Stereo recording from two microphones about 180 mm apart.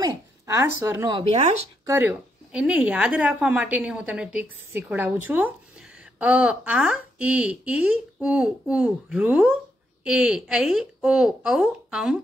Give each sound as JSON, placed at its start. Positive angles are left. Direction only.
{"t": 0.8, "sound": "speech", "side_deg": -15}
{"t": 1.1, "sound": "speech", "side_deg": -35}
{"t": 1.9, "sound": "speech", "side_deg": -10}